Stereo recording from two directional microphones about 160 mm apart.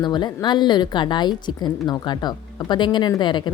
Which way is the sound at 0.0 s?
30° left (ahead or behind).